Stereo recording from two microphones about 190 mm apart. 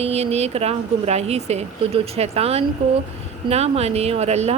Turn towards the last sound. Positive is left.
turn(degrees=-35)  # may be behind; listen again after turning